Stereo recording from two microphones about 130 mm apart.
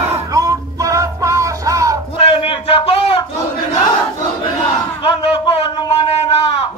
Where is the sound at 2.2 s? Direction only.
45° left (ahead or behind).